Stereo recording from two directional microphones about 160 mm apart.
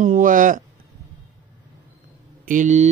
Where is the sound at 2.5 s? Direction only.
50° right (ahead or behind).